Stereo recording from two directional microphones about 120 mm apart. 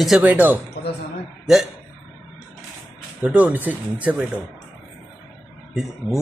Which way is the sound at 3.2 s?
15° right (ahead or behind).